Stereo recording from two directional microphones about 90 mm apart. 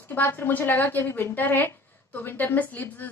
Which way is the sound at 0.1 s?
25° left (ahead or behind).